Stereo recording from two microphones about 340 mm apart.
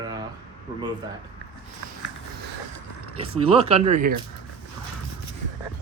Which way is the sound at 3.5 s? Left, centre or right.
Centre.